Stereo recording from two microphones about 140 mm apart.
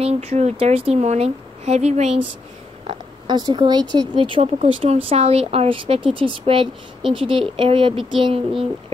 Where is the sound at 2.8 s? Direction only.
30° right (ahead or behind).